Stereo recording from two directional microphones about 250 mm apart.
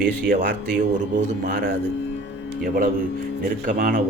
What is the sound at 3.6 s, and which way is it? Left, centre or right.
Speech, right.